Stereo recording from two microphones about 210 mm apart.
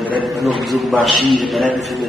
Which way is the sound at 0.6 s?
Centre (ahead or behind).